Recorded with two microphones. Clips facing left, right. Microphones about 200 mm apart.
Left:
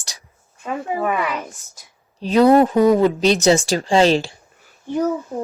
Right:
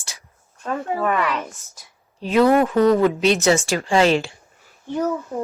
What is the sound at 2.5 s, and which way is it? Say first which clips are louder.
Speech: left 4 dB; 35° left (ahead or behind).